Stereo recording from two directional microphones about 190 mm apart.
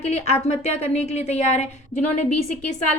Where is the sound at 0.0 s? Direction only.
35° left (ahead or behind).